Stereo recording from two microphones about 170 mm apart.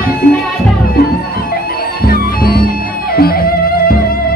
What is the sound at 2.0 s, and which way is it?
Music, 60° left (ahead or behind).